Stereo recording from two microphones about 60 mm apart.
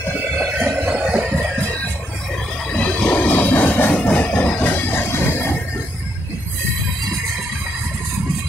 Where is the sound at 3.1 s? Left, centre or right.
Left.